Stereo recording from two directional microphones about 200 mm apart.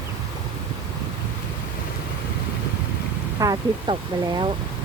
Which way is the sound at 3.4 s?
20° right (ahead or behind).